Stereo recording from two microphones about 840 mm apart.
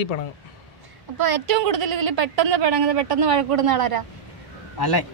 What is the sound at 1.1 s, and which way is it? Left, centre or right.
A woman's voice, right.